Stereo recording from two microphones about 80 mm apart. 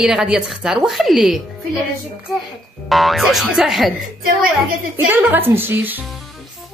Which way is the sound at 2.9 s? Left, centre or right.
Centre.